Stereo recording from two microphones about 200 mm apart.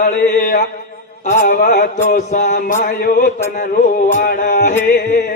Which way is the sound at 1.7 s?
40° left (ahead or behind).